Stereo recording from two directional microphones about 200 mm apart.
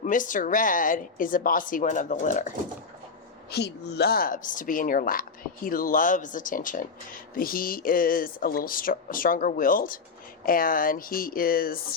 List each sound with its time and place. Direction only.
0.0 s speech: 40° left (ahead or behind)
3.5 s speech: 55° left (ahead or behind)